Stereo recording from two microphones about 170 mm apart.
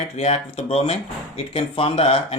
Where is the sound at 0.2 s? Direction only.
35° left (ahead or behind).